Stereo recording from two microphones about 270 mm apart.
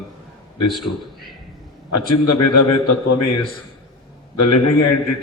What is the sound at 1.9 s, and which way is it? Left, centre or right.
Speech, left.